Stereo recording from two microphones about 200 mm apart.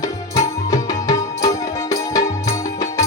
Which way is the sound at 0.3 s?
15° left (ahead or behind).